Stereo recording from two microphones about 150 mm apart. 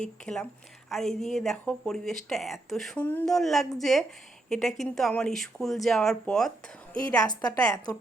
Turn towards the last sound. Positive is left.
turn(degrees=25)  # may be behind; listen again after turning